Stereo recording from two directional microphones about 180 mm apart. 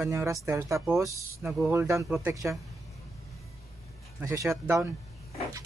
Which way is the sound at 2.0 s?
Centre (ahead or behind).